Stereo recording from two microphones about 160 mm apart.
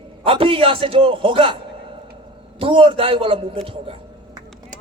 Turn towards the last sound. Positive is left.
turn(degrees=-35)  # may be behind; listen again after turning